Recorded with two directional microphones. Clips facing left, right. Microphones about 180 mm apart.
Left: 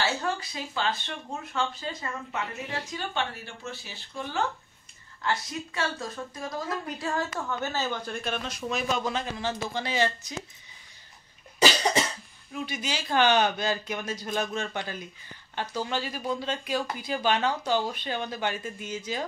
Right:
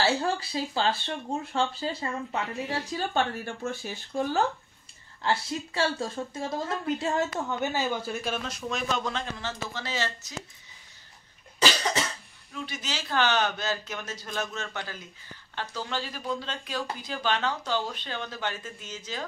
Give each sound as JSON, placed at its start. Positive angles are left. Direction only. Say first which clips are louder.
{"t": 0.0, "sound": "speech", "louder": "right 3 dB", "side_deg": -30}
{"t": 2.9, "sound": "speech", "louder": "right 5 dB", "side_deg": -45}
{"t": 5.2, "sound": "a woman's voice", "louder": "right 2 dB", "side_deg": -30}
{"t": 11.6, "sound": "cough", "louder": "left 3 dB", "side_deg": 15}
{"t": 12.6, "sound": "speech", "louder": "left 3 dB", "side_deg": 10}